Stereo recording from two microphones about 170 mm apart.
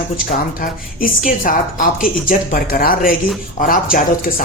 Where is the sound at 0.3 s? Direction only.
55° left (ahead or behind).